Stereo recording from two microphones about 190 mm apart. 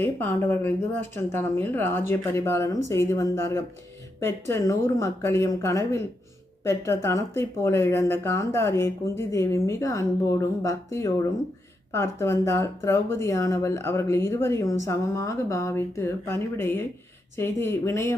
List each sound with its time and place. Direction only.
0.0 s speech: 10° left (ahead or behind)